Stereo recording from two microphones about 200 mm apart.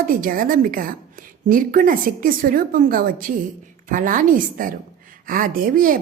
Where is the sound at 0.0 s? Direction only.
45° right (ahead or behind).